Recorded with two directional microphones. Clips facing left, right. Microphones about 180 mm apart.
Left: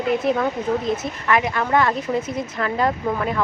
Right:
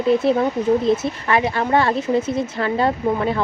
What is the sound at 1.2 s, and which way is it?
A woman's voice, 30° right (ahead or behind).